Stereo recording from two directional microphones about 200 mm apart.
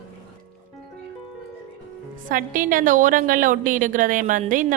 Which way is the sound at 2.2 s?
45° right (ahead or behind).